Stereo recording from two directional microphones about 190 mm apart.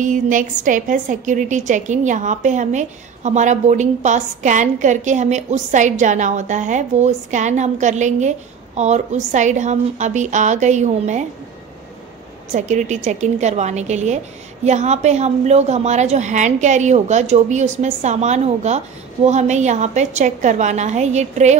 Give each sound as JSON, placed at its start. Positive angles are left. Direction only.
{"t": 0.0, "sound": "a woman's voice", "side_deg": -40}
{"t": 12.5, "sound": "a woman's voice", "side_deg": -40}